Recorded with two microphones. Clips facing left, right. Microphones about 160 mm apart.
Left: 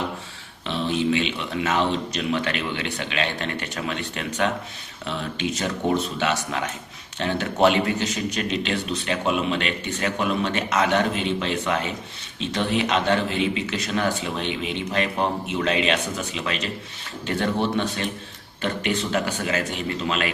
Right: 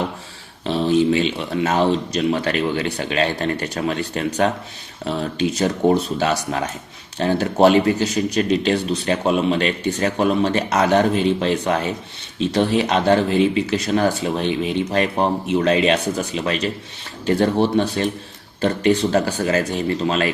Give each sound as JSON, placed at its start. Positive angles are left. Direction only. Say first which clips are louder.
{"t": 0.6, "sound": "speech", "louder": "right 7 dB", "side_deg": -40}